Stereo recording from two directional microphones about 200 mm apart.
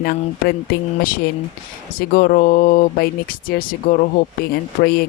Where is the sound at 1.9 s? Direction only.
45° left (ahead or behind).